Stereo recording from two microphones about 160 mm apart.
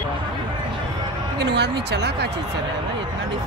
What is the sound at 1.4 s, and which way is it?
Speech, 90° right.